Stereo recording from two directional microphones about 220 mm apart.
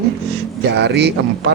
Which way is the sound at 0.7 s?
50° right (ahead or behind).